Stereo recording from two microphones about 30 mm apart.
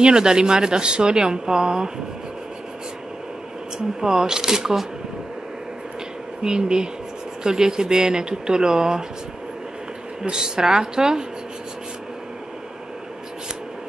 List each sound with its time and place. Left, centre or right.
0.0 s a woman's voice: right
3.7 s a woman's voice: right
6.4 s a woman's voice: right
10.3 s a woman's voice: right